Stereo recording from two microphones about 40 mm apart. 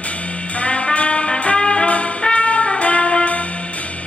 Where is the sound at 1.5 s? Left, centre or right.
Left.